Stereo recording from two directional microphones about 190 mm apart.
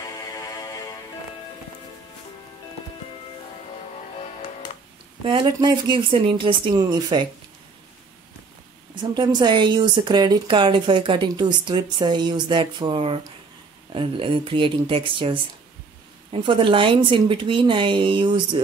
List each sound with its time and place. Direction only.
0.0 s music: 20° left (ahead or behind)
5.2 s speech: 25° right (ahead or behind)
9.1 s speech: 20° right (ahead or behind)